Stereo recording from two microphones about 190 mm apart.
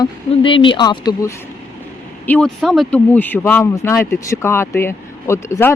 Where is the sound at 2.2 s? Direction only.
5° left (ahead or behind).